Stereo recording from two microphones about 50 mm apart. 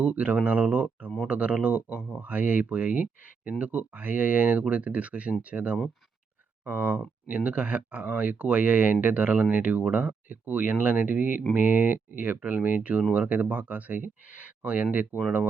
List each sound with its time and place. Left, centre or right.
0.0 s speech: right